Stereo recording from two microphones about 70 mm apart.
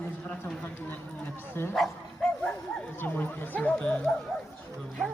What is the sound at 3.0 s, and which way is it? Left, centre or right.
Speech, left.